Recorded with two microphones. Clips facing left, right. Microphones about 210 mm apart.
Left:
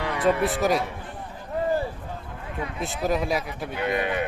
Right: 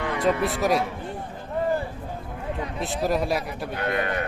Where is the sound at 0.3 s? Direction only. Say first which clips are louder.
Left 1 dB; centre (ahead or behind).